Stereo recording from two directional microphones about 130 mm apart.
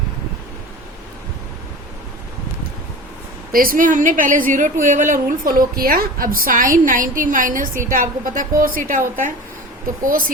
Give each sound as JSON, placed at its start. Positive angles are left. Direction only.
{"t": 3.5, "sound": "a woman's voice", "side_deg": -90}